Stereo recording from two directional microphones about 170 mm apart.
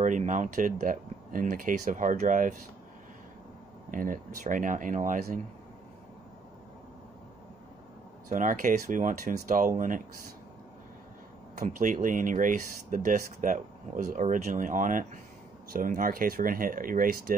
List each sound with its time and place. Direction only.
0.0 s speech: 45° right (ahead or behind)
3.9 s speech: 50° right (ahead or behind)
8.3 s speech: 50° right (ahead or behind)
11.6 s speech: 50° right (ahead or behind)